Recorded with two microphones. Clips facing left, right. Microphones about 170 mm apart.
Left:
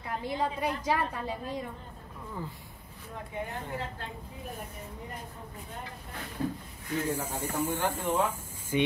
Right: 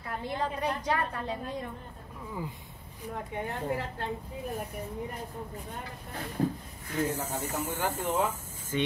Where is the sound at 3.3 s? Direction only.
70° right (ahead or behind).